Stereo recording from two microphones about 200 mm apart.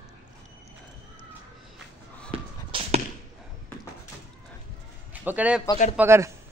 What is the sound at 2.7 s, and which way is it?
Arrow, 25° right (ahead or behind).